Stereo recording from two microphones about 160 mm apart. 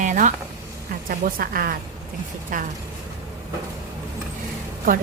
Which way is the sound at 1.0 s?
65° right (ahead or behind).